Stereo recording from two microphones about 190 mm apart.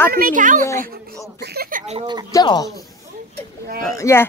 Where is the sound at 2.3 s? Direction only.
20° left (ahead or behind).